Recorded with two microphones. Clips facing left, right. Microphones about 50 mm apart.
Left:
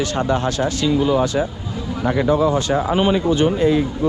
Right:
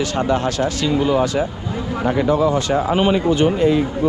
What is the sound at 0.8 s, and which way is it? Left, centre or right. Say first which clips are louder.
Speech: even; right.